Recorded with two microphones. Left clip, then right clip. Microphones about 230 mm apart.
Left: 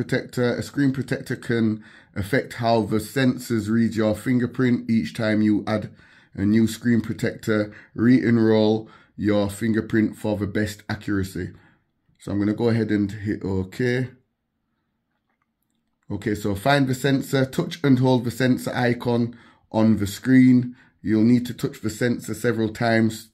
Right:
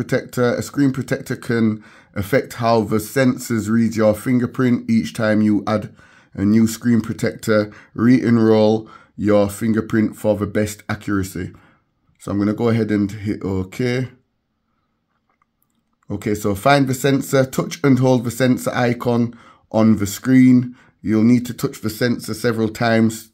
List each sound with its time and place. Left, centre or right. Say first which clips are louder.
0.1 s speech: right 6 dB; right
16.1 s speech: right 5 dB; right